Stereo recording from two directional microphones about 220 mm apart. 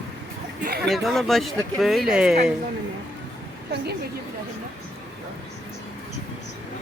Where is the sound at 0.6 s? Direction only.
45° right (ahead or behind).